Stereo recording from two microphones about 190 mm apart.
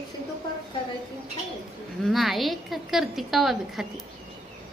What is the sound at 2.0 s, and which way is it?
A woman's voice, centre (ahead or behind).